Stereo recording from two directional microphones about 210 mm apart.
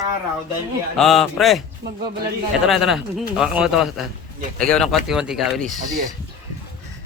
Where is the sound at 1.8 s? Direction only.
50° right (ahead or behind).